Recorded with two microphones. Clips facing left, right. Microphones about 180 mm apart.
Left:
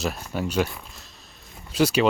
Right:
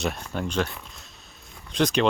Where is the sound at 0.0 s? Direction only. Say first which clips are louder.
Left 1 dB; 5° left (ahead or behind).